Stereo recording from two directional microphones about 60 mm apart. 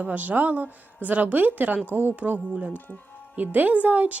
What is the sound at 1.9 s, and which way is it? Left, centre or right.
Music, right.